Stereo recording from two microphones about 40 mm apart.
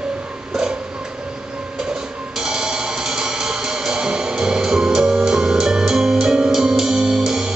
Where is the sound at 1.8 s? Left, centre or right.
Centre.